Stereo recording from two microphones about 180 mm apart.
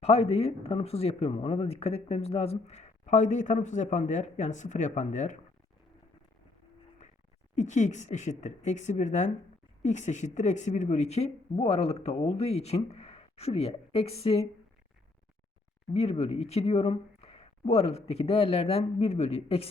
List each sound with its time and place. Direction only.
0.0 s speech: 35° left (ahead or behind)
7.5 s speech: 40° left (ahead or behind)
15.9 s speech: 35° left (ahead or behind)